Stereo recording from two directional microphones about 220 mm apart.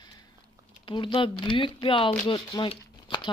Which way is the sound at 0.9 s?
20° left (ahead or behind).